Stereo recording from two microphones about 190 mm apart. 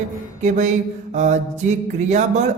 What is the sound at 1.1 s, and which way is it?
Mantra, 40° right (ahead or behind).